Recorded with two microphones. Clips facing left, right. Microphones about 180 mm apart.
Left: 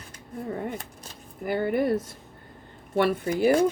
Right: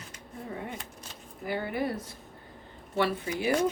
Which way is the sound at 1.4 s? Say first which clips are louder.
Left 6 dB; 50° left (ahead or behind).